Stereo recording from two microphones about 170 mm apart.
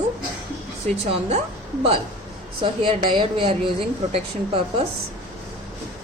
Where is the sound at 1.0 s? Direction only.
40° right (ahead or behind).